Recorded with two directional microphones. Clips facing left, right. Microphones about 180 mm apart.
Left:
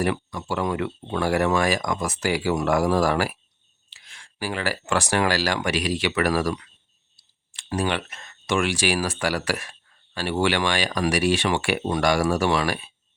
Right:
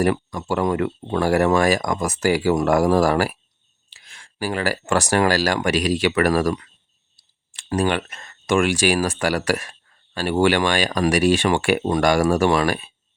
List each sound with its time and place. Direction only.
0.0 s speech: 45° right (ahead or behind)